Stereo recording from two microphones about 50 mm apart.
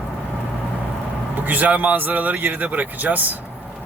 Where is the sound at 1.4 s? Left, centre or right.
Right.